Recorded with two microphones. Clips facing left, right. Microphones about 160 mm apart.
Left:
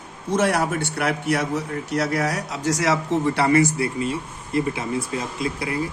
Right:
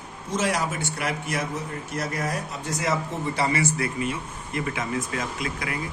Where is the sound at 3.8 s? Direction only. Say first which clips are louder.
Left 3 dB; 30° left (ahead or behind).